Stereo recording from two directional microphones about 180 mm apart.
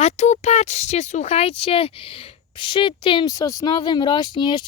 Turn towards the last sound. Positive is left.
turn(degrees=25)  # may be behind; listen again after turning